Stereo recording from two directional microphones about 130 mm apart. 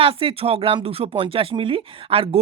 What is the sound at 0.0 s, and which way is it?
Speech, 45° right (ahead or behind).